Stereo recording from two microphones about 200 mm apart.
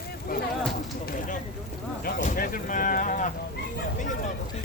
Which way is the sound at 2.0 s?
45° left (ahead or behind).